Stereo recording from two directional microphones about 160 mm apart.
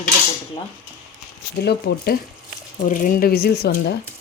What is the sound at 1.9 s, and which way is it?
Speech, 75° left (ahead or behind).